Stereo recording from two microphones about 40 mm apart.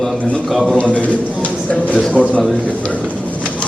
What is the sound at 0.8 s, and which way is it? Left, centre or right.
Speech, left.